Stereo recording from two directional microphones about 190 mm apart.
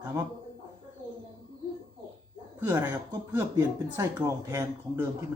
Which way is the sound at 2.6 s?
10° right (ahead or behind).